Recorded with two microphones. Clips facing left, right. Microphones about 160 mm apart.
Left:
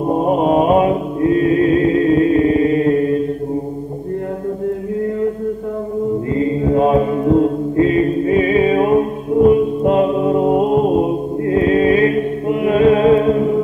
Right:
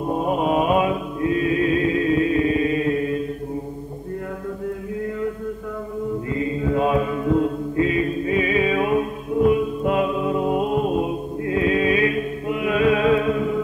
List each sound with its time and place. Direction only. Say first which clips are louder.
0.0 s mantra: left 6 dB; 30° left (ahead or behind)
6.3 s mantra: left 6 dB; 35° left (ahead or behind)